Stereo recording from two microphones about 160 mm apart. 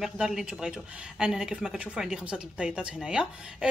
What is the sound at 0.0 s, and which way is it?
Speech, centre (ahead or behind).